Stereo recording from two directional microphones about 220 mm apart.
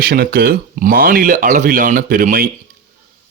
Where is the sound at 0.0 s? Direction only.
45° right (ahead or behind).